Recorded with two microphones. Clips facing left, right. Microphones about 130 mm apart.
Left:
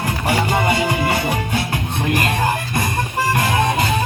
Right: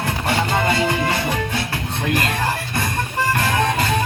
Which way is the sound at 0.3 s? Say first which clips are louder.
Left 2 dB; 15° left (ahead or behind).